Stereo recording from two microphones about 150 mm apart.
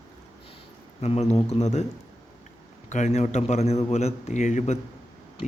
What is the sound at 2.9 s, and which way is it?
A man's voice, 50° left (ahead or behind).